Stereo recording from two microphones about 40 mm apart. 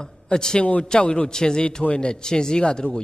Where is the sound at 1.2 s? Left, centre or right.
Centre.